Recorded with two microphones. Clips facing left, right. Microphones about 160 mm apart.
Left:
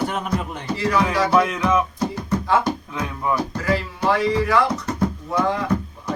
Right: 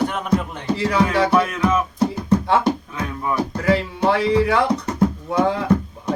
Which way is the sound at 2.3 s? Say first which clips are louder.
Right 2 dB; 20° right (ahead or behind).